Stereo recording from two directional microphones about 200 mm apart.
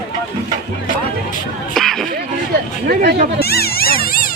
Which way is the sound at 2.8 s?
55° right (ahead or behind).